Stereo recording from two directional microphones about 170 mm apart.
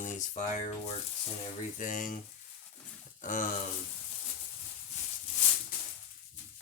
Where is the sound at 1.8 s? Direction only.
50° left (ahead or behind).